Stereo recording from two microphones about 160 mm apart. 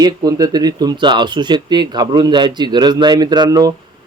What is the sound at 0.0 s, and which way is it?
Speech, 25° right (ahead or behind).